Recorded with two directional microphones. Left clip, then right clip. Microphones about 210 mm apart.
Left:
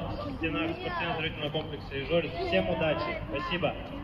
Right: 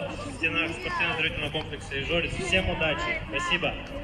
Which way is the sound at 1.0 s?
Centre (ahead or behind).